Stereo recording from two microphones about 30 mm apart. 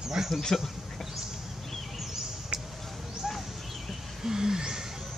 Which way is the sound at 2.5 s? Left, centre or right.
Right.